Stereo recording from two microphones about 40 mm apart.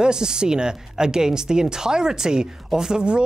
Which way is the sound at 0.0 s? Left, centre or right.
Centre.